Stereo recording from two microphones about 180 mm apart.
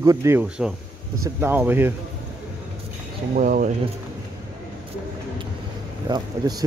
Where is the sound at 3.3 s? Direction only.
45° right (ahead or behind).